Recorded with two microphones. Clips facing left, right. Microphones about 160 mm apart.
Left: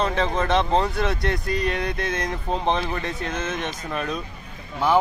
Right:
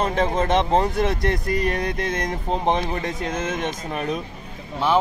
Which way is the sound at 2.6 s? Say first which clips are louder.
Right 2 dB; 15° right (ahead or behind).